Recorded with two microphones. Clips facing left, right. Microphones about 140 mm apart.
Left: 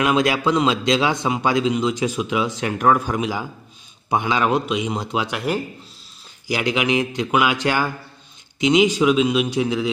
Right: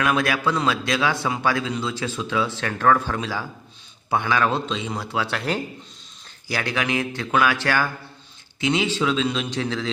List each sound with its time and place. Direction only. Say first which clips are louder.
0.0 s a man's voice: left 3 dB; 20° left (ahead or behind)